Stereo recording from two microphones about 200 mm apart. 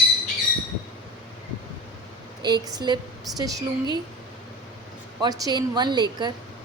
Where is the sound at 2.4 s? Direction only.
20° right (ahead or behind).